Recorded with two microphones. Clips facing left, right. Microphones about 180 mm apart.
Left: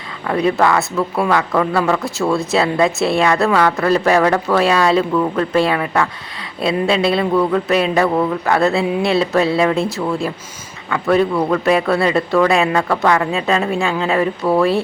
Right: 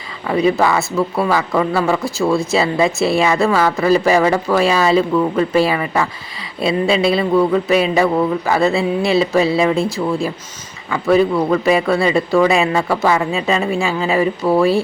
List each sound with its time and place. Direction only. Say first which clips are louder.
0.3 s speech: right 1 dB; centre (ahead or behind)